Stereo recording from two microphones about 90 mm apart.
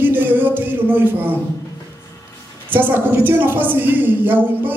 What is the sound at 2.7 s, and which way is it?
Speech, 25° right (ahead or behind).